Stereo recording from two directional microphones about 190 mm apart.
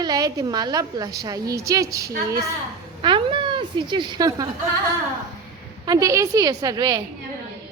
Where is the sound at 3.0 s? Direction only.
25° right (ahead or behind).